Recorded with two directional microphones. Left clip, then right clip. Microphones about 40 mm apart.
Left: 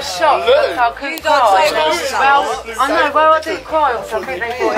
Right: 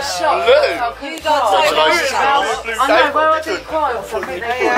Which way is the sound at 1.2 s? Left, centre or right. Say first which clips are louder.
Left 2 dB; centre.